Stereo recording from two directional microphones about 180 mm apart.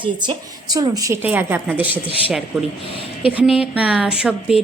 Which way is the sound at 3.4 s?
5° right (ahead or behind).